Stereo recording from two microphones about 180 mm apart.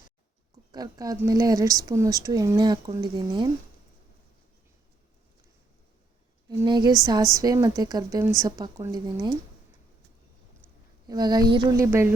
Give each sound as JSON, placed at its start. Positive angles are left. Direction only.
{"t": 0.7, "sound": "speech", "side_deg": -20}
{"t": 6.5, "sound": "a woman's voice", "side_deg": -25}
{"t": 11.1, "sound": "speech", "side_deg": -20}
{"t": 11.9, "sound": "speech", "side_deg": -10}